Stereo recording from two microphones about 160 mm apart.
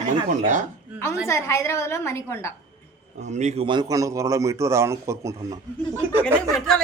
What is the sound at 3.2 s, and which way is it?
Speech, 45° right (ahead or behind).